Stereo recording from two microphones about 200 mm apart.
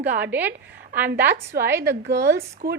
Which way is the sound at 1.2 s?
55° right (ahead or behind).